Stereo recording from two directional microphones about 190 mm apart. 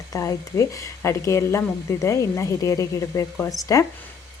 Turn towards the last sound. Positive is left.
turn(degrees=20)  # may be behind; listen again after turning